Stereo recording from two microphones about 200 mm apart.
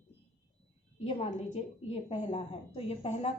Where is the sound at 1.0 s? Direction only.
30° left (ahead or behind).